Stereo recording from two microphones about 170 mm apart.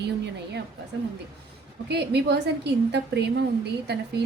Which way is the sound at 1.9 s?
75° right (ahead or behind).